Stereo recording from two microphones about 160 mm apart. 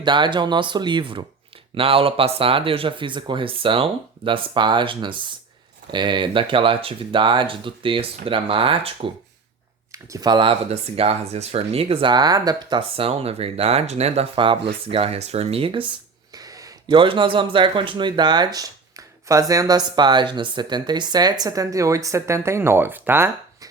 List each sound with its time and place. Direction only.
0.0 s speech: 30° right (ahead or behind)
9.9 s speech: 20° right (ahead or behind)
16.3 s speech: 25° right (ahead or behind)